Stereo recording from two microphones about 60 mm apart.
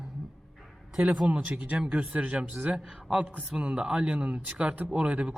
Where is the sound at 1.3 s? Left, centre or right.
Right.